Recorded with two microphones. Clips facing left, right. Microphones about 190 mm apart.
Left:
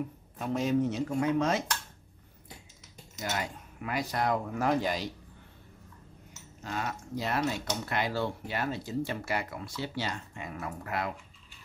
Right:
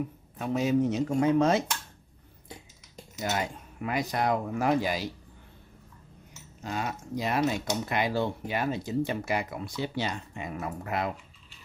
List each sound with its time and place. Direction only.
0.4 s speech: 5° right (ahead or behind)
0.8 s speech: 20° right (ahead or behind)
3.2 s speech: 20° right (ahead or behind)
6.6 s speech: 15° right (ahead or behind)